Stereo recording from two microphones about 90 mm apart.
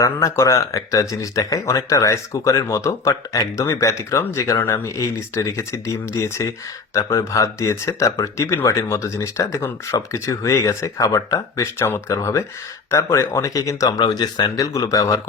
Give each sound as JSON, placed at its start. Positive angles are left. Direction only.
{"t": 0.0, "sound": "speech", "side_deg": 35}
{"t": 11.8, "sound": "speech", "side_deg": 30}
{"t": 14.6, "sound": "speech", "side_deg": 40}